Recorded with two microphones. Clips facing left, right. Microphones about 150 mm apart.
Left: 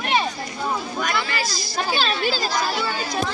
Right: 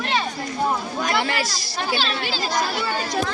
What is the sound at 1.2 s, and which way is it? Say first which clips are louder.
Speech: right 3 dB; 70° right (ahead or behind).